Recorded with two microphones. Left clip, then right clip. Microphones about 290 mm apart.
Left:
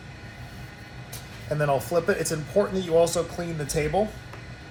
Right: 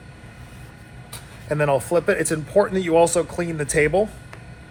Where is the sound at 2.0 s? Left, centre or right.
Right.